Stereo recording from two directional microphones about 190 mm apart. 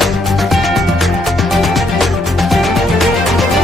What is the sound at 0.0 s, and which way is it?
Music, centre (ahead or behind).